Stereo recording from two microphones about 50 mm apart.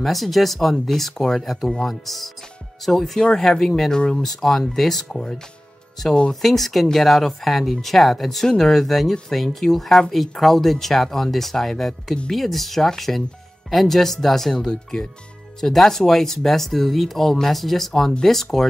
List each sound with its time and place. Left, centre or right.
0.0 s speech: centre
6.4 s speech: centre